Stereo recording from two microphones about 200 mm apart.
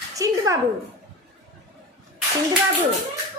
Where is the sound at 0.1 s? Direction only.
15° right (ahead or behind).